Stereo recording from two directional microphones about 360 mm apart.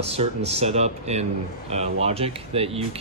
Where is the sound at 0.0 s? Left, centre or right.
Centre.